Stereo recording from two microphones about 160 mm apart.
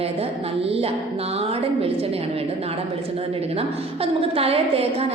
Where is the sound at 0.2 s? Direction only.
40° right (ahead or behind).